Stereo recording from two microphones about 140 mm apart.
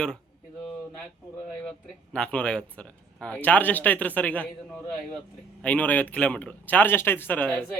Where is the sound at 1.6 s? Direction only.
5° left (ahead or behind).